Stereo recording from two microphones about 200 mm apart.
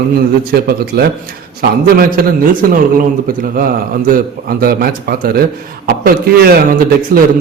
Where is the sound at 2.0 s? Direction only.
45° right (ahead or behind).